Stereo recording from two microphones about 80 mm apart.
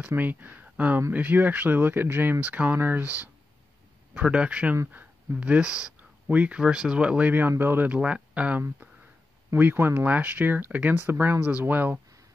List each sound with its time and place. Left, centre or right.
0.1 s speech: right